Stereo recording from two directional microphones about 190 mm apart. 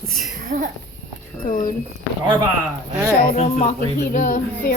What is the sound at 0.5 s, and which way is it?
Speech, 45° right (ahead or behind).